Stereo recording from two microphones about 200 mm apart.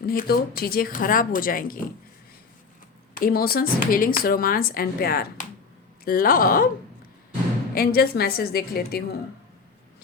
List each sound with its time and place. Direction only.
0.0 s speech: 50° left (ahead or behind)
3.2 s speech: 45° left (ahead or behind)
7.7 s speech: 50° left (ahead or behind)